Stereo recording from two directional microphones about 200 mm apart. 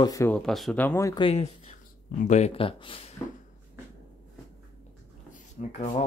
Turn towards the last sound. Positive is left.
turn(degrees=35)  # may be behind; listen again after turning